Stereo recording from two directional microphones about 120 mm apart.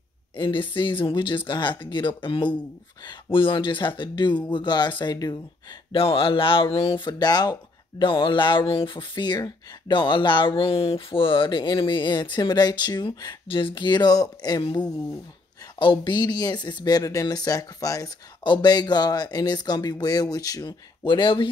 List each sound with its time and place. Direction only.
0.4 s speech: 45° left (ahead or behind)
5.9 s speech: 50° left (ahead or behind); by 14.6 s 35° left (ahead or behind)
15.8 s speech: 40° left (ahead or behind)
21.0 s speech: 45° left (ahead or behind)